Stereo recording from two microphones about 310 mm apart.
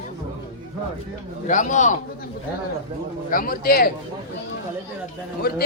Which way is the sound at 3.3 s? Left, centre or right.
Left.